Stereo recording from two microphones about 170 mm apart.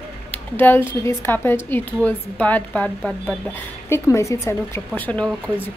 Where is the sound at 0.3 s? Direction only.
10° left (ahead or behind).